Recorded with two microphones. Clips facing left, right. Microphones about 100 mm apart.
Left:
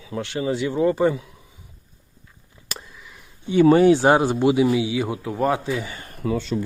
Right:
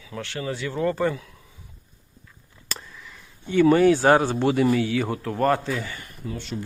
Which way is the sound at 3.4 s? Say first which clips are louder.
Left 3 dB; 20° left (ahead or behind).